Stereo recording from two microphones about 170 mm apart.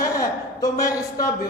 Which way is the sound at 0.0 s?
20° left (ahead or behind).